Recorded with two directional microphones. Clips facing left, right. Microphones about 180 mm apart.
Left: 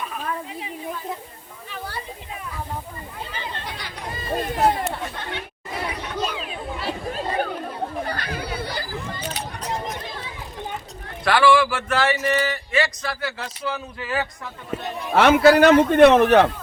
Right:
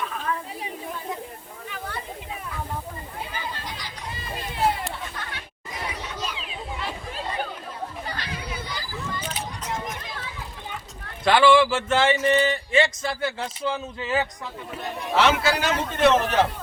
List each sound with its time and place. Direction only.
3.8 s chatter: 60° left (ahead or behind)
4.8 s chatter: 70° left (ahead or behind)
11.3 s speech: 20° right (ahead or behind)
15.1 s a man's voice: 55° left (ahead or behind)